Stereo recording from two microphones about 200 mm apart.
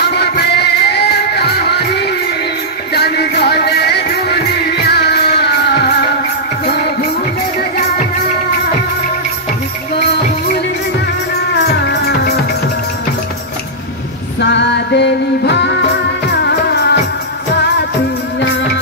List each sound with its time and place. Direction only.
0.0 s music: 55° left (ahead or behind)
11.8 s music: 55° left (ahead or behind)
14.4 s music: 60° left (ahead or behind)